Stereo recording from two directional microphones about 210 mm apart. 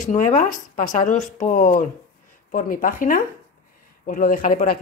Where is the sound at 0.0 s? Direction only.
35° left (ahead or behind).